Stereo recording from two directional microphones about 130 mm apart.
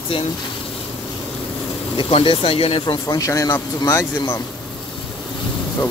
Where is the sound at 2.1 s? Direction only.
45° left (ahead or behind).